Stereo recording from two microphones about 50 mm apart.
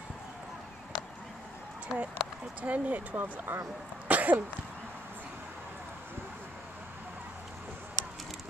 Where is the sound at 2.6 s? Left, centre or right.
Right.